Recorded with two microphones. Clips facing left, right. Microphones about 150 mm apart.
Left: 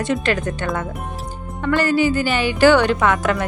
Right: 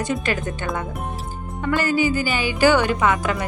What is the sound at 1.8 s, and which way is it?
Music, 45° right (ahead or behind).